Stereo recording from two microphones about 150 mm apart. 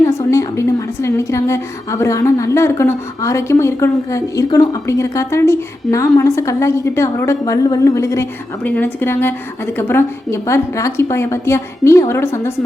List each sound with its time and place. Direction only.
0.0 s a woman's voice: 20° left (ahead or behind)